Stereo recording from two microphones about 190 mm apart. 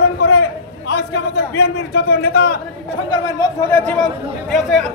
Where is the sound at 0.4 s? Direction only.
60° left (ahead or behind).